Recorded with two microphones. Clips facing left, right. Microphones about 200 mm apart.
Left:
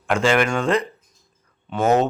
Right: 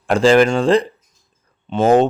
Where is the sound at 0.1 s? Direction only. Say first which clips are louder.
Right 7 dB; 35° right (ahead or behind).